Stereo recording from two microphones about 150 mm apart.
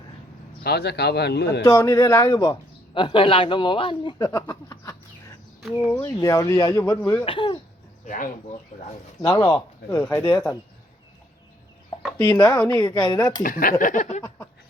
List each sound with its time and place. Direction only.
0.6 s speech: 90° left
1.6 s a man's voice: 25° left (ahead or behind)
7.0 s speech: 10° left (ahead or behind)
7.3 s speech: 35° left (ahead or behind)
8.0 s speech: 55° left (ahead or behind)
9.2 s a man's voice: 25° left (ahead or behind)
12.1 s a man's voice: 20° left (ahead or behind)
13.4 s speech: 70° left (ahead or behind)